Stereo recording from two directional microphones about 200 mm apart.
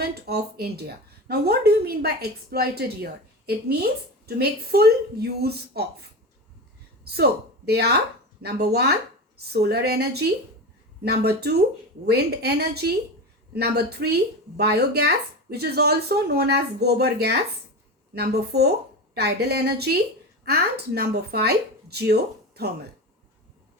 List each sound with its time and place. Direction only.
0.0 s speech: 50° right (ahead or behind)